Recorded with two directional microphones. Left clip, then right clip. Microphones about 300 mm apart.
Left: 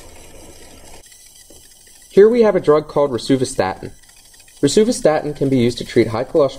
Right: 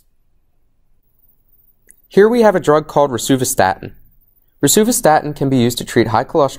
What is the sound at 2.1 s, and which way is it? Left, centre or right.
Speech, right.